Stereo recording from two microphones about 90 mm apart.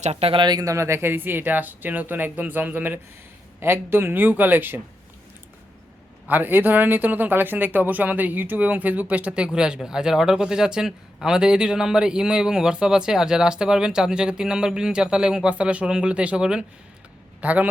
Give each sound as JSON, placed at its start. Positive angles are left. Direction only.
{"t": 0.2, "sound": "speech", "side_deg": -90}
{"t": 0.4, "sound": "speech", "side_deg": -45}
{"t": 6.2, "sound": "a man's voice", "side_deg": -20}